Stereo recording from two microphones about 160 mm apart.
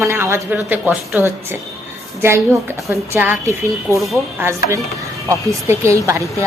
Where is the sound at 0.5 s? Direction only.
5° right (ahead or behind).